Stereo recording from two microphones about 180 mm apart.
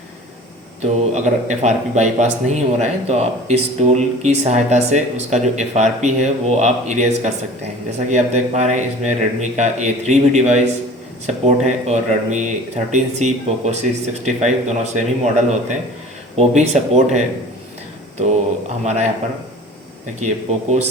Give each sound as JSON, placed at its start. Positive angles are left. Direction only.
{"t": 0.8, "sound": "speech", "side_deg": -40}
{"t": 20.1, "sound": "speech", "side_deg": -40}